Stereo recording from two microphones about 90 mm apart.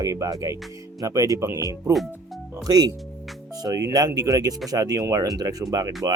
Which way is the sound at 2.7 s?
45° right (ahead or behind).